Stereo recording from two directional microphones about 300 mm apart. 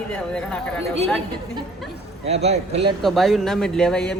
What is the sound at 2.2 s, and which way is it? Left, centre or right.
Speech, right.